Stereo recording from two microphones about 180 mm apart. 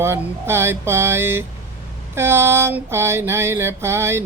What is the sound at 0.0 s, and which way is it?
Mantra, 15° right (ahead or behind).